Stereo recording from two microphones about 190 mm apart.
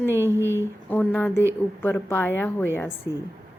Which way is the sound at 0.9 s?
10° left (ahead or behind).